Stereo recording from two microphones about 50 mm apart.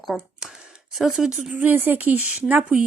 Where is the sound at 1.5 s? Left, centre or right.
Right.